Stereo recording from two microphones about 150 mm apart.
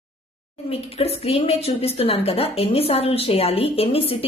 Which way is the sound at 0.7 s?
40° left (ahead or behind).